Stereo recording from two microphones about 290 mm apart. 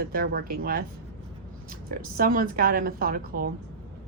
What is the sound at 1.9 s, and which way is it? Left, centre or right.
A woman's voice, right.